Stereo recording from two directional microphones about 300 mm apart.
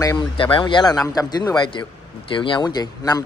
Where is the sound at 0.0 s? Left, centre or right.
Centre.